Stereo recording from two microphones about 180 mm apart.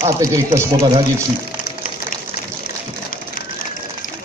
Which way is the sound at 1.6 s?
50° left (ahead or behind).